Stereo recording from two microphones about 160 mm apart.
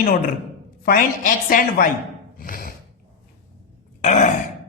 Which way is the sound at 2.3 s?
65° left (ahead or behind).